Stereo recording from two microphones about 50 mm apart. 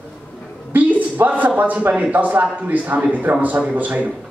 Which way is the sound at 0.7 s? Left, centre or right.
Right.